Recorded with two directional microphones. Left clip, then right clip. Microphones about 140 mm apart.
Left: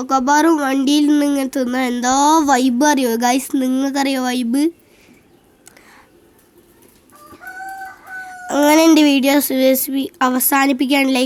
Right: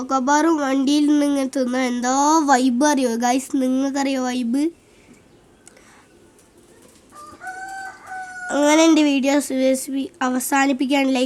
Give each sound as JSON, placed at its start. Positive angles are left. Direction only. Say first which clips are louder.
{"t": 0.0, "sound": "speech", "louder": "left 4 dB", "side_deg": 30}
{"t": 8.4, "sound": "speech", "louder": "left 3 dB", "side_deg": 30}